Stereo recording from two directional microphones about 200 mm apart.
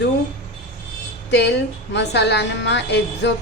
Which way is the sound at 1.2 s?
60° left (ahead or behind).